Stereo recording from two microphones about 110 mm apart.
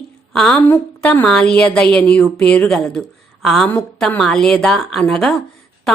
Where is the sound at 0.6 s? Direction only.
15° left (ahead or behind).